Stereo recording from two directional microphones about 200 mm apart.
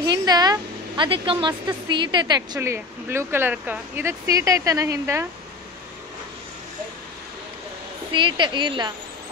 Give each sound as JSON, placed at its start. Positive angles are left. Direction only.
{"t": 0.0, "sound": "a woman's voice", "side_deg": -20}
{"t": 8.1, "sound": "a woman's voice", "side_deg": -25}